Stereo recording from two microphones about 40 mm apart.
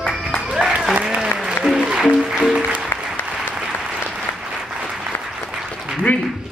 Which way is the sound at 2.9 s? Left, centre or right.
Left.